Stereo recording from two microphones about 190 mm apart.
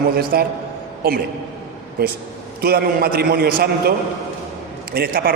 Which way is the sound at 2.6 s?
55° right (ahead or behind).